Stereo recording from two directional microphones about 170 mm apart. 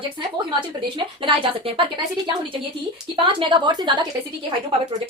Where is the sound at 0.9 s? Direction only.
30° right (ahead or behind).